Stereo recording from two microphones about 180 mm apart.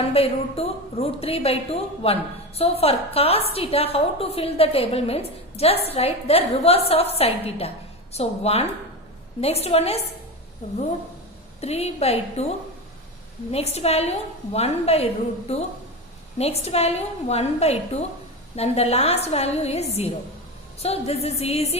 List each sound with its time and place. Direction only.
0.0 s a woman's voice: 35° left (ahead or behind)
11.6 s a woman's voice: 35° left (ahead or behind)
13.5 s a woman's voice: 35° left (ahead or behind)